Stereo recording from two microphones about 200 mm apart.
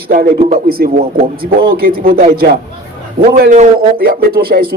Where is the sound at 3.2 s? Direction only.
40° right (ahead or behind).